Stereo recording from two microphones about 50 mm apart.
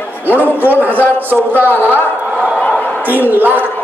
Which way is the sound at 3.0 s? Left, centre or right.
Right.